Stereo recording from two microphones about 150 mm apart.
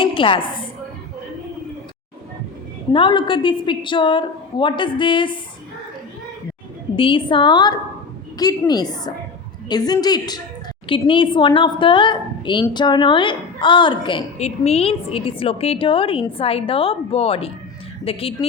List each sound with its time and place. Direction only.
0.0 s a sound: 35° left (ahead or behind)
2.9 s a woman's voice: 35° left (ahead or behind)
6.9 s a woman's voice: 35° left (ahead or behind)
14.3 s a woman's voice: 45° left (ahead or behind)